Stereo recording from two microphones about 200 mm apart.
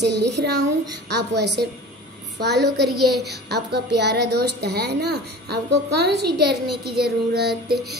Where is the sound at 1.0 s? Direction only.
55° right (ahead or behind).